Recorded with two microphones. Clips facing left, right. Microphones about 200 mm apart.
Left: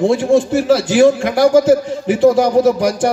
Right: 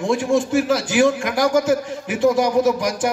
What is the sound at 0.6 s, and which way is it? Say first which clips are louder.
Speech: left 6 dB; 70° left (ahead or behind).